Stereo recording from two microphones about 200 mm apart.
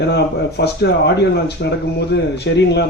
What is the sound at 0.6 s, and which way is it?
Speech, 55° left (ahead or behind).